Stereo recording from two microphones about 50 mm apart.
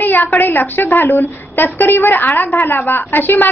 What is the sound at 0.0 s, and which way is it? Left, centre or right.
A woman's voice, left.